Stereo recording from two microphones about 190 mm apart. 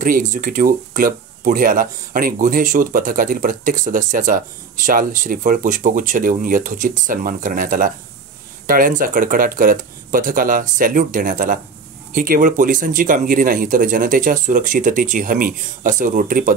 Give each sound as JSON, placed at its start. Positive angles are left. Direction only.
{"t": 0.0, "sound": "speech", "side_deg": -45}